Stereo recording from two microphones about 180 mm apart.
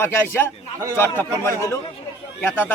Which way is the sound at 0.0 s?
15° left (ahead or behind).